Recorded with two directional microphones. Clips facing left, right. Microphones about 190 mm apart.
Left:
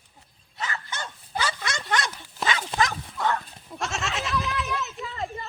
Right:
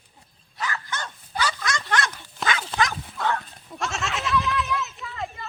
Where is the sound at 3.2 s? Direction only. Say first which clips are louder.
Even; centre (ahead or behind).